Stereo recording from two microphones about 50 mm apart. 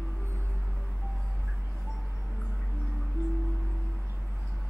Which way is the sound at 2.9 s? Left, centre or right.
Right.